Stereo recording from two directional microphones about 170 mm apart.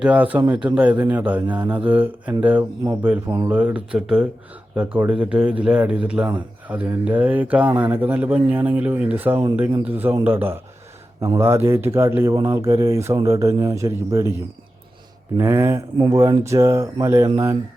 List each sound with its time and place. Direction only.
0.0 s a man's voice: 10° right (ahead or behind)
15.4 s a man's voice: 15° right (ahead or behind)